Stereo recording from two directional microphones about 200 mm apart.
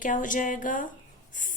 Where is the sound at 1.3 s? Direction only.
40° left (ahead or behind).